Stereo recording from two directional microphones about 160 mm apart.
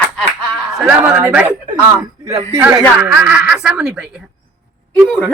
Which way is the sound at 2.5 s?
20° right (ahead or behind).